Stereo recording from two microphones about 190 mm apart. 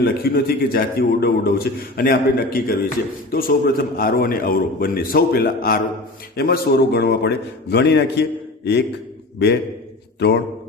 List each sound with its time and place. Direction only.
0.0 s a man's voice: 55° left (ahead or behind)
10.2 s a man's voice: 65° left (ahead or behind)